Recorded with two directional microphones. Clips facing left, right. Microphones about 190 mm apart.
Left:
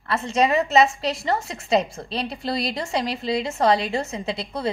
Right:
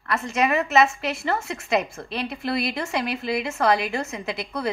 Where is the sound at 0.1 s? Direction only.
30° left (ahead or behind).